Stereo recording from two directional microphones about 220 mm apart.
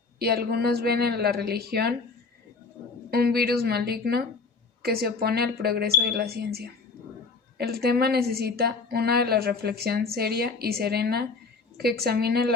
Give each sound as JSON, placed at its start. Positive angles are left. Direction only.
{"t": 0.2, "sound": "a woman's voice", "side_deg": -45}
{"t": 3.1, "sound": "a woman's voice", "side_deg": -45}